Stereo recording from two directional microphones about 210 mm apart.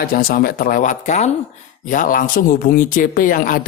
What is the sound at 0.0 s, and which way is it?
Speech, 45° left (ahead or behind).